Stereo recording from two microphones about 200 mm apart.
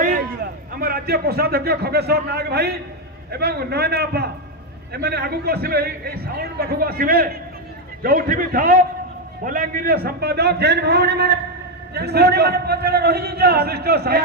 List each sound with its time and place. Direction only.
0.8 s a man's voice: 50° right (ahead or behind)